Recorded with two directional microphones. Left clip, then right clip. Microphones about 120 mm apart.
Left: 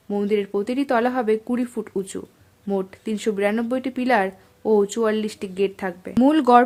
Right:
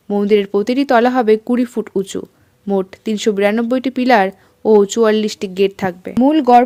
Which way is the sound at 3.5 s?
40° right (ahead or behind).